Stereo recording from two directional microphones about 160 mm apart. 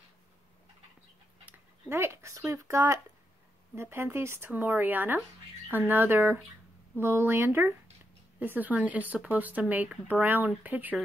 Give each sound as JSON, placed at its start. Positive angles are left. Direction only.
{"t": 1.9, "sound": "speech", "side_deg": -15}